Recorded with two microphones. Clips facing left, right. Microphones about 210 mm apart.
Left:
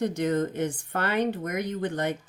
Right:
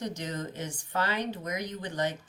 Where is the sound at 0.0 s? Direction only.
55° left (ahead or behind).